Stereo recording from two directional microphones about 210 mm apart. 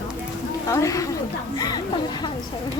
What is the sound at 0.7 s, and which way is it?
Speech, 15° left (ahead or behind).